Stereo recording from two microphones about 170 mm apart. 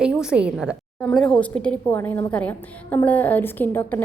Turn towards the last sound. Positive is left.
turn(degrees=10)  # may be behind; listen again after turning